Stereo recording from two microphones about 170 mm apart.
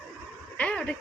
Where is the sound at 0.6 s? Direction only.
5° left (ahead or behind).